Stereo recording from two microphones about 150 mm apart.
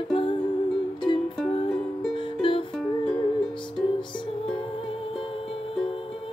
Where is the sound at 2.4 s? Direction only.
35° left (ahead or behind).